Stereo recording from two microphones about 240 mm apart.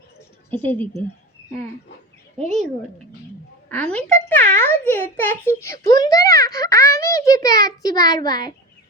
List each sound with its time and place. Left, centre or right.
0.5 s a child's voice: centre
2.4 s speech: right
3.7 s a child's voice: centre